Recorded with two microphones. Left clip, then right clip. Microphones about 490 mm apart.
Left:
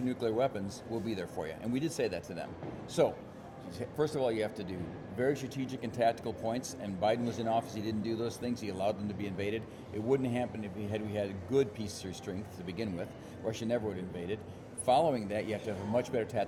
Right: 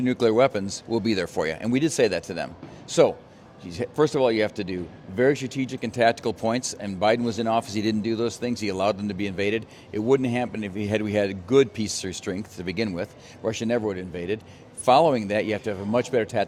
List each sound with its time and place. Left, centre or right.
0.0 s a man's voice: right